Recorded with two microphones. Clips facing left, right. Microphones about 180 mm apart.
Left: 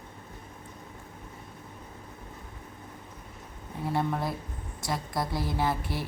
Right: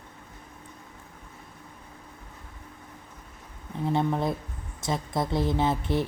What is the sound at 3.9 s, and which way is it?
A woman's voice, 20° right (ahead or behind).